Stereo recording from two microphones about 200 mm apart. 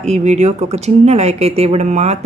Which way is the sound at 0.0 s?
35° right (ahead or behind).